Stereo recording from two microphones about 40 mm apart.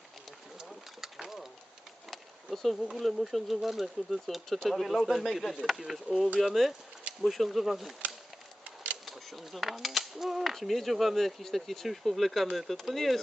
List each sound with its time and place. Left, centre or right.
0.7 s pigeon: centre
2.0 s speech: centre
5.0 s speech: centre
8.6 s a sound: right
9.0 s speech: centre
10.5 s speech: centre